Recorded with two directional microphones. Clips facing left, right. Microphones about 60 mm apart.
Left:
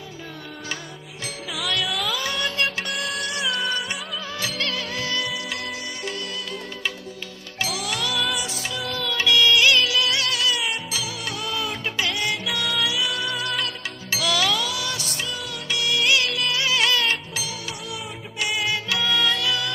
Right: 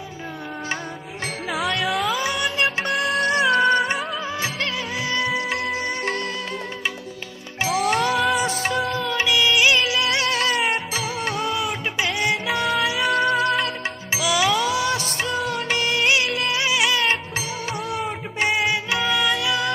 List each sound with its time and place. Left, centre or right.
1.5 s music: right
7.6 s music: right
8.9 s music: right
14.1 s music: centre